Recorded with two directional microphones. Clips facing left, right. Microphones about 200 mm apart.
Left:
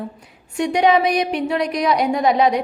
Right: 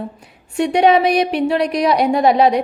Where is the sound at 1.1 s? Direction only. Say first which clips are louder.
Right 3 dB; 65° right (ahead or behind).